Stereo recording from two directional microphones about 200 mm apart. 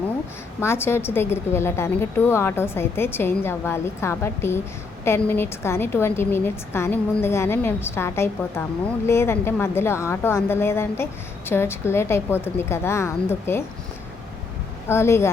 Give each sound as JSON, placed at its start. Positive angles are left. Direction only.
{"t": 0.6, "sound": "a woman's voice", "side_deg": 10}
{"t": 14.8, "sound": "a woman's voice", "side_deg": 15}